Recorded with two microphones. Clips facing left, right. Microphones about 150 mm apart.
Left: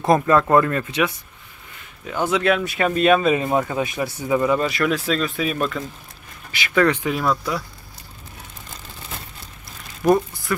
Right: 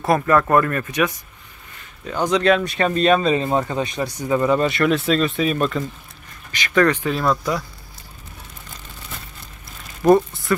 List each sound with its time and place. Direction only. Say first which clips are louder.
0.0 s speech: left 1 dB; 20° left (ahead or behind)
2.3 s speech: right 3 dB; 5° left (ahead or behind)
6.5 s speech: right 1 dB; 10° left (ahead or behind)
10.0 s speech: right 3 dB; centre (ahead or behind)